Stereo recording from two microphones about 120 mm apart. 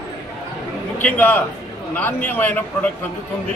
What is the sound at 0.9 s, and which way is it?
A man's voice, 15° left (ahead or behind).